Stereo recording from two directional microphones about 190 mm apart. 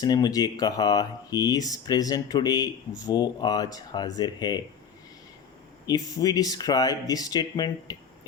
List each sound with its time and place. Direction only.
0.0 s speech: 20° left (ahead or behind)
5.8 s speech: 20° left (ahead or behind)